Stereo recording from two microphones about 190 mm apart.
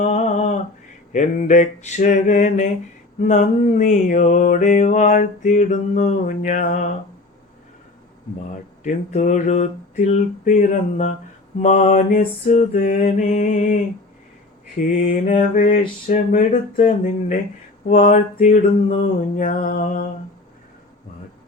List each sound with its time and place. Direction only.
0.0 s a sound: 35° left (ahead or behind)
1.1 s mantra: 40° left (ahead or behind)
8.8 s mantra: 45° left (ahead or behind)
15.3 s mantra: 40° left (ahead or behind)